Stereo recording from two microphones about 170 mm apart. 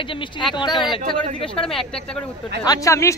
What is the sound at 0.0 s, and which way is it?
Speech, 30° left (ahead or behind).